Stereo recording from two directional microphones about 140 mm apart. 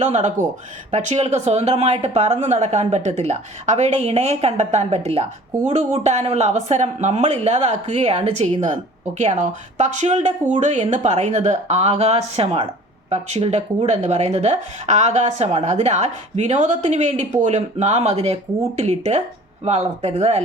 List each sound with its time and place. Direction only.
0.0 s speech: 55° right (ahead or behind)